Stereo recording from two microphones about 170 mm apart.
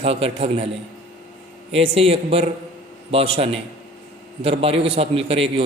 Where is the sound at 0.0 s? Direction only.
35° right (ahead or behind).